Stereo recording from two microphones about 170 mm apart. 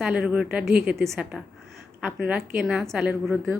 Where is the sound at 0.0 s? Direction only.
5° right (ahead or behind).